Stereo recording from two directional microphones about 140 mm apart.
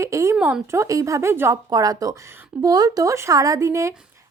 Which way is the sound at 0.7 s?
20° right (ahead or behind).